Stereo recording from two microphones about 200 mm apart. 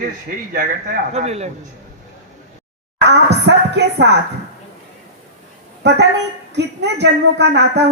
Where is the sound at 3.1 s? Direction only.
55° right (ahead or behind).